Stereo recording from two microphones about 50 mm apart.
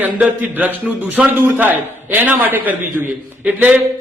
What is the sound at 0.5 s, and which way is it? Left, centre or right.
A man's voice, right.